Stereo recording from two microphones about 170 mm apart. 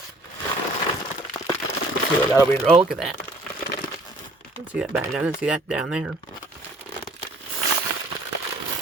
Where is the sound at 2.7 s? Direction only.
5° right (ahead or behind).